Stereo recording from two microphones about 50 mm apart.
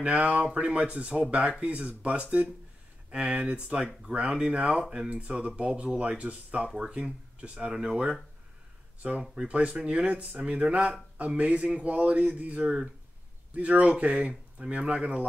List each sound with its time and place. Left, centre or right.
0.0 s speech: right
7.7 s speech: centre
9.3 s speech: right